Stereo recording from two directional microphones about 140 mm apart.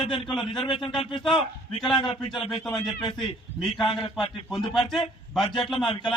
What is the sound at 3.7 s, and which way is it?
Speech, 35° left (ahead or behind).